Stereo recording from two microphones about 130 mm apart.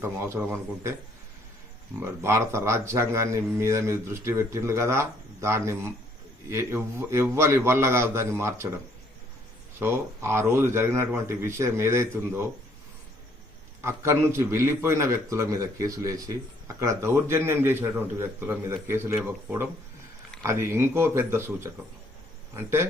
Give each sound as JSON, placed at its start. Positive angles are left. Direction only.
{"t": 0.0, "sound": "a man's voice", "side_deg": -20}
{"t": 2.0, "sound": "a man's voice", "side_deg": -20}
{"t": 9.8, "sound": "a man's voice", "side_deg": -20}
{"t": 13.8, "sound": "a man's voice", "side_deg": -20}